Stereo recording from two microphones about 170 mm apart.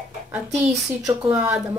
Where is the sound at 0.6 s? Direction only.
5° right (ahead or behind).